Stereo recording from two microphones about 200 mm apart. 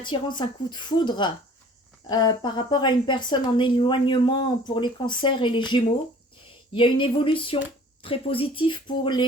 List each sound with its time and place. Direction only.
0.0 s a woman's voice: 25° left (ahead or behind)